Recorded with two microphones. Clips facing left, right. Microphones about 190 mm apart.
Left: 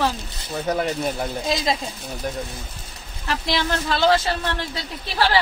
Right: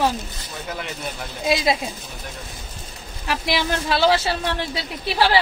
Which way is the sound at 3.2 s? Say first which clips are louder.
Right 1 dB; 10° right (ahead or behind).